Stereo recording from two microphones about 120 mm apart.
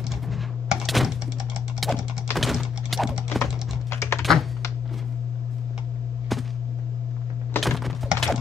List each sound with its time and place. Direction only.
0.3 s a sound: centre (ahead or behind)
1.8 s typing: centre (ahead or behind)
2.3 s thunk: centre (ahead or behind)
3.9 s typing: 20° left (ahead or behind)
4.2 s computer keyboard: centre (ahead or behind)
7.6 s typing: centre (ahead or behind)